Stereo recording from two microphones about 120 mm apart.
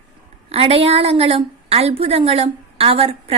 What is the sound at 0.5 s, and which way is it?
A woman's voice, 50° right (ahead or behind).